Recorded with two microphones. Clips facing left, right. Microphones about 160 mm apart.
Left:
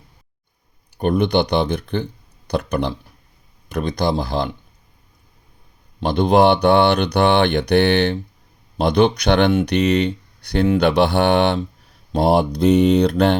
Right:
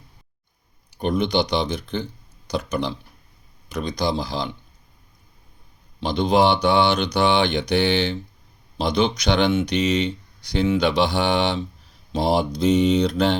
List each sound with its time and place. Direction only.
0.9 s speech: 60° left (ahead or behind)
6.0 s speech: 55° left (ahead or behind)